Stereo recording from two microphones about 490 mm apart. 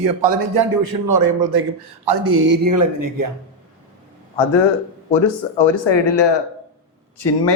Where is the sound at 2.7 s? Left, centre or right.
Right.